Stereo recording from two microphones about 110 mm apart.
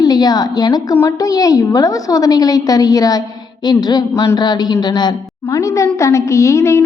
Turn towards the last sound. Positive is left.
turn(degrees=25)  # may be behind; listen again after turning